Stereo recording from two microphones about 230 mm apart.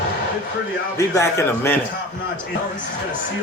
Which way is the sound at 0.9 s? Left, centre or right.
Centre.